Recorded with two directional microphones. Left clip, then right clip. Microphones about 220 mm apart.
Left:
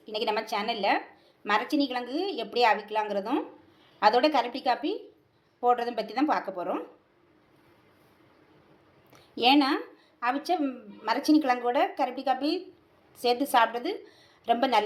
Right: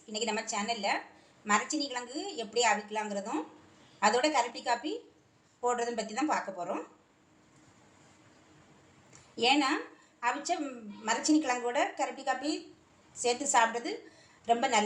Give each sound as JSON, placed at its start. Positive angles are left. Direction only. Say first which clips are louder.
{"t": 0.1, "sound": "a woman's voice", "louder": "left 5 dB", "side_deg": 35}
{"t": 9.3, "sound": "a woman's voice", "louder": "left 5 dB", "side_deg": 35}